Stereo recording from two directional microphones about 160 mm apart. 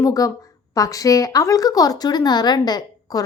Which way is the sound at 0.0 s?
20° left (ahead or behind).